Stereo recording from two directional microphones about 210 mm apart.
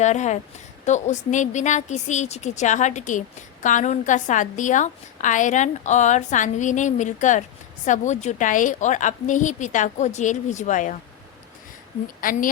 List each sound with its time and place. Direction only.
0.0 s a woman's voice: 35° left (ahead or behind)
12.2 s a woman's voice: 40° left (ahead or behind)